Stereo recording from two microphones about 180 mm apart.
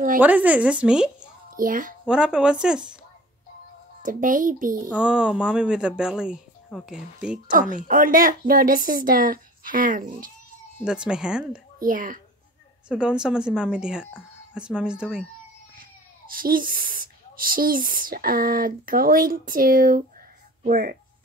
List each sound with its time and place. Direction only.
0.2 s speech: 10° right (ahead or behind)
1.6 s speech: 50° right (ahead or behind)
2.0 s speech: 5° right (ahead or behind)
4.0 s speech: 45° right (ahead or behind)
4.9 s speech: 5° right (ahead or behind)
7.7 s speech: 50° right (ahead or behind)
10.8 s speech: 5° right (ahead or behind)
11.8 s speech: 50° right (ahead or behind)
12.8 s speech: 5° right (ahead or behind)
15.7 s speech: 50° right (ahead or behind)